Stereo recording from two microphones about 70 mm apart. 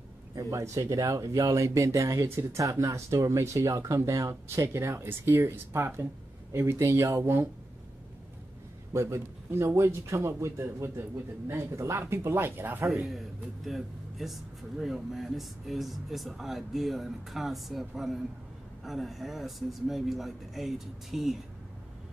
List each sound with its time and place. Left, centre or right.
0.4 s speech: right
8.9 s speech: right
12.8 s speech: centre